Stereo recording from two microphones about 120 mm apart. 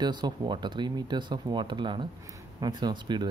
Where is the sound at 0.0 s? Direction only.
35° right (ahead or behind).